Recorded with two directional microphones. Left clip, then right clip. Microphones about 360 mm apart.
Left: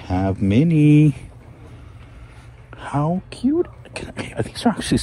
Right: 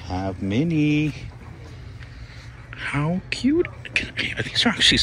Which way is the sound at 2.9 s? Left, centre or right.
Centre.